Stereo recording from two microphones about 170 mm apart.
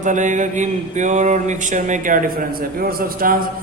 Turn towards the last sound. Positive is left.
turn(degrees=-60)  # may be behind; listen again after turning